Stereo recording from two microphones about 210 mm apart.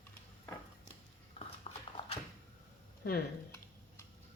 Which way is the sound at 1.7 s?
30° left (ahead or behind).